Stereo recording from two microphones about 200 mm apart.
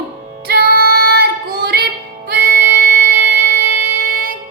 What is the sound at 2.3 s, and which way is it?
Music, 45° right (ahead or behind).